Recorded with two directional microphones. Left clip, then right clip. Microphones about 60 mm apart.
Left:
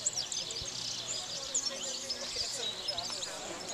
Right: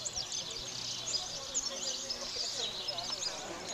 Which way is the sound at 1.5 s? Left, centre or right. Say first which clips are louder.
Even; left.